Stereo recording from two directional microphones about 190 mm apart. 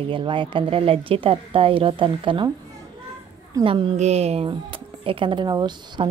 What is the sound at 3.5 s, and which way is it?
A woman's voice, 25° right (ahead or behind).